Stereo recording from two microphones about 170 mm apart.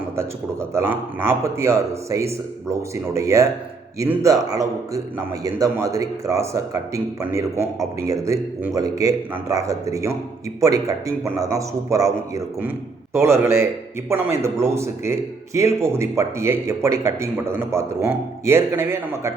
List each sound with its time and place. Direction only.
0.2 s a man's voice: 15° right (ahead or behind)